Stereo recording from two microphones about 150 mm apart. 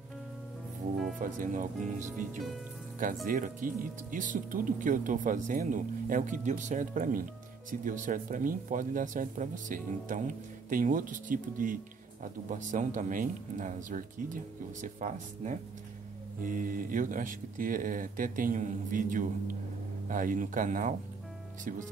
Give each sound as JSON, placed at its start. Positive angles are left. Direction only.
{"t": 1.2, "sound": "speech", "side_deg": -65}
{"t": 3.3, "sound": "speech", "side_deg": -60}